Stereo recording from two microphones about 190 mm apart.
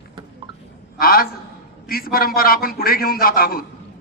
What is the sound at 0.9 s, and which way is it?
A man's voice, 50° left (ahead or behind).